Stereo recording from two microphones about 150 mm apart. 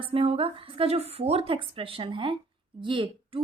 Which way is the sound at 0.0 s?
40° right (ahead or behind).